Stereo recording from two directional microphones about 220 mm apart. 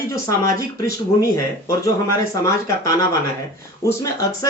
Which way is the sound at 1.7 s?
15° left (ahead or behind).